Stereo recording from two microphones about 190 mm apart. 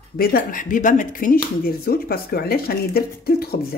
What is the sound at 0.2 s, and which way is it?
Speech, 50° left (ahead or behind).